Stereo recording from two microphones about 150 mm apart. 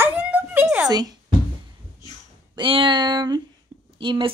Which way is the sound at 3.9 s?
35° right (ahead or behind).